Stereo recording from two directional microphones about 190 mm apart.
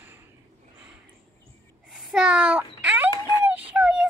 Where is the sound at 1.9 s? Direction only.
5° right (ahead or behind).